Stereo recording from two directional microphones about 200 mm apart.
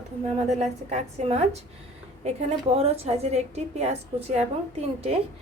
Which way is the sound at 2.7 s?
30° right (ahead or behind).